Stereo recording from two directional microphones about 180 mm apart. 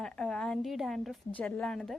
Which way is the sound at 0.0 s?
5° left (ahead or behind).